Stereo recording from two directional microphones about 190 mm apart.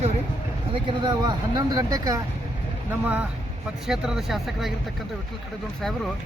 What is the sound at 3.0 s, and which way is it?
Speech, 10° right (ahead or behind).